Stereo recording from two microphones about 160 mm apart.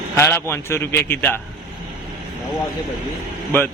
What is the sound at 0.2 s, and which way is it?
A man's voice, 15° left (ahead or behind).